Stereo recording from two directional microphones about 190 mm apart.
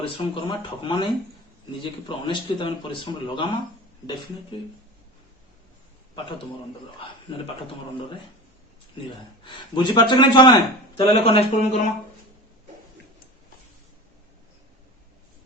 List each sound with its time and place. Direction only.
0.0 s speech: 25° left (ahead or behind)
7.3 s speech: 30° left (ahead or behind)
9.4 s speech: 25° left (ahead or behind)